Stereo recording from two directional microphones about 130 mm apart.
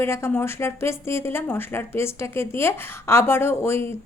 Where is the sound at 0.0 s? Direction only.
20° left (ahead or behind).